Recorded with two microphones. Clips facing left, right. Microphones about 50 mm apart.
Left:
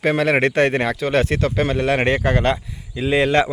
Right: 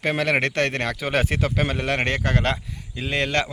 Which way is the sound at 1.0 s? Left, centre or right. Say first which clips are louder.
Left 4 dB; centre.